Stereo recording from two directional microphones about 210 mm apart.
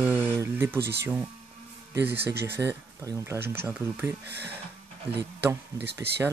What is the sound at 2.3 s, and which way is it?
Speech, 50° right (ahead or behind).